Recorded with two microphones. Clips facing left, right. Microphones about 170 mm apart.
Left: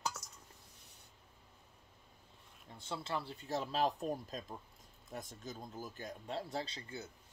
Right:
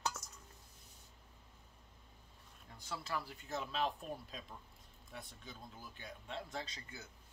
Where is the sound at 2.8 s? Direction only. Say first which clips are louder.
Left 2 dB; 25° left (ahead or behind).